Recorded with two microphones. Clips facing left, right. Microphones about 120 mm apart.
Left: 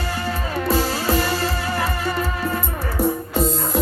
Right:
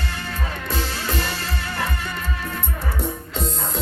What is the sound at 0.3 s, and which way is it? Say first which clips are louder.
Music: left 9 dB; 30° left (ahead or behind).